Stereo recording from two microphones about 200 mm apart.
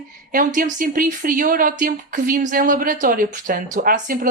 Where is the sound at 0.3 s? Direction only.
45° right (ahead or behind).